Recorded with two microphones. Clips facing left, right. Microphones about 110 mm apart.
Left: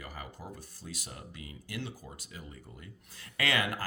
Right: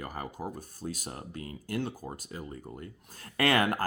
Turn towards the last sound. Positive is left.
turn(degrees=-50)  # may be behind; listen again after turning